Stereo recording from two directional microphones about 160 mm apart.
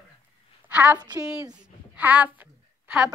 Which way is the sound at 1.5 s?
10° right (ahead or behind).